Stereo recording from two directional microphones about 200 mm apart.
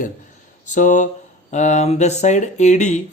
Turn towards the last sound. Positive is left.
turn(degrees=35)  # may be behind; listen again after turning